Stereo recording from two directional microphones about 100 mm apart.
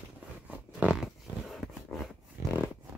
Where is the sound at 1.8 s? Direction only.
Centre (ahead or behind).